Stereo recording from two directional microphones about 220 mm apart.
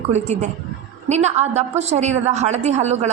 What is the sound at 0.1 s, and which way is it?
A woman's voice, 30° right (ahead or behind).